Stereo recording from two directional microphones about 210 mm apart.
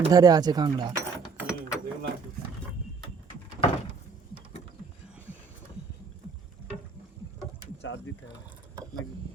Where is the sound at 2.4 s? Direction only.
45° right (ahead or behind).